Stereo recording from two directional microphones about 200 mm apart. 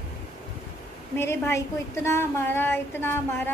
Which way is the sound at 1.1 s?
10° left (ahead or behind).